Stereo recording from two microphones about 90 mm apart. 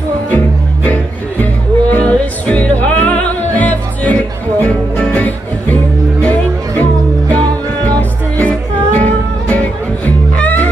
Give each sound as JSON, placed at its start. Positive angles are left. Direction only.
{"t": 1.4, "sound": "music", "side_deg": 15}